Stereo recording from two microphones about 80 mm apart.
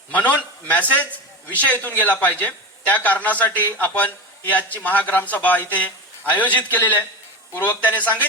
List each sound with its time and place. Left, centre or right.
0.1 s a man's voice: left